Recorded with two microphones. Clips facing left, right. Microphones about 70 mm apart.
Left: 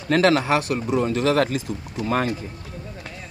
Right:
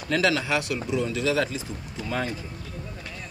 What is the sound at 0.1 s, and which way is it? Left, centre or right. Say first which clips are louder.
Speech: left 6 dB; left.